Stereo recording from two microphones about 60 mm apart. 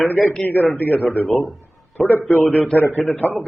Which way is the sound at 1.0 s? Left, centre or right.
Centre.